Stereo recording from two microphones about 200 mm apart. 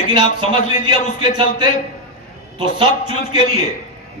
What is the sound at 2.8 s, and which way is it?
Speech, 25° right (ahead or behind).